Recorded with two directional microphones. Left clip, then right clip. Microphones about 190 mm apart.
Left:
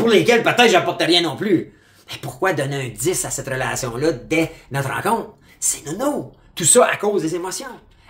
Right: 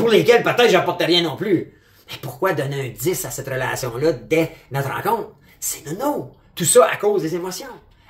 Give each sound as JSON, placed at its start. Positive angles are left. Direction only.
{"t": 0.1, "sound": "speech", "side_deg": 20}